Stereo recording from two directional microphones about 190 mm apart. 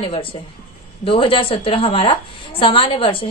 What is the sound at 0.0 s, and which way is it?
A woman's voice, 30° left (ahead or behind).